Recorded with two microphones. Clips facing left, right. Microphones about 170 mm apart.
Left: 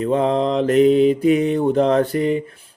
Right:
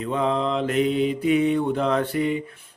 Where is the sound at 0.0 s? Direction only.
40° left (ahead or behind).